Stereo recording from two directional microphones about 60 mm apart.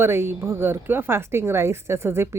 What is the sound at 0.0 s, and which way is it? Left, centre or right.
A woman's voice, right.